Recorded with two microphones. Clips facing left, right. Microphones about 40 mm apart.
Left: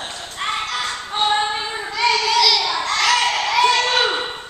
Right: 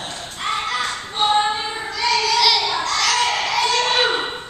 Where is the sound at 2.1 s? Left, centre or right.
Centre.